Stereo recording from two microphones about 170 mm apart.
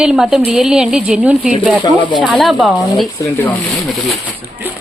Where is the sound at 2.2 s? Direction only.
5° left (ahead or behind).